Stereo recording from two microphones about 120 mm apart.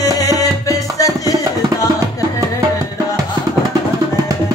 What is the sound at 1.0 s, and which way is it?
Music, 30° left (ahead or behind).